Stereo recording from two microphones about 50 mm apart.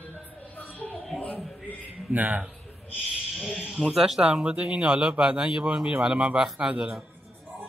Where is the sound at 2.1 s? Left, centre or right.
Right.